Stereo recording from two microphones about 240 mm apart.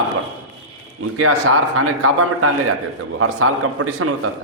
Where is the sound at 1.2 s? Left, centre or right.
Right.